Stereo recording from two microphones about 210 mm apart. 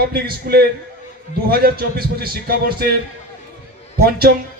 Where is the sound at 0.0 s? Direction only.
45° right (ahead or behind).